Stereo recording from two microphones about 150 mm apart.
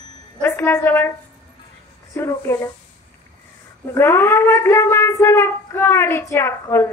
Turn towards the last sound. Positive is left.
turn(degrees=15)  # may be behind; listen again after turning